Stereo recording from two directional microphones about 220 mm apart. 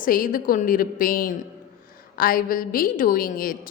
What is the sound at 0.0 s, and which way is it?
A woman's voice, 40° left (ahead or behind).